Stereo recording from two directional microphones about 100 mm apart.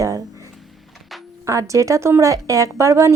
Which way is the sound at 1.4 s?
30° right (ahead or behind).